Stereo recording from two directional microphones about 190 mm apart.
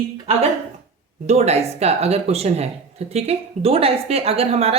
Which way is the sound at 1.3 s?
35° right (ahead or behind).